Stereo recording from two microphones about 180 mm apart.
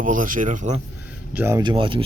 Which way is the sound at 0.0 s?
45° right (ahead or behind).